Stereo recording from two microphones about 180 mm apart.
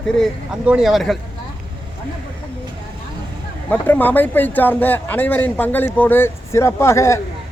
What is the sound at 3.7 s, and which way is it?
Speech, 10° left (ahead or behind).